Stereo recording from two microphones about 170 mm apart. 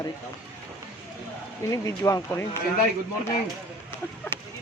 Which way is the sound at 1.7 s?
20° left (ahead or behind).